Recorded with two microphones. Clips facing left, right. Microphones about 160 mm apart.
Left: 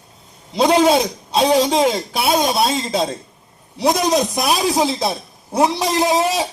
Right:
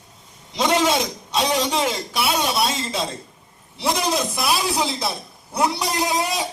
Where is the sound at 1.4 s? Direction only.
40° left (ahead or behind).